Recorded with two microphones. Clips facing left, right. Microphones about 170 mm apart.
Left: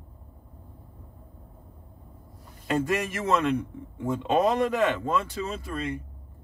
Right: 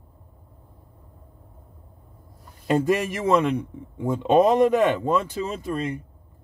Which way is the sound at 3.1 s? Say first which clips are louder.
Right 4 dB; 15° right (ahead or behind).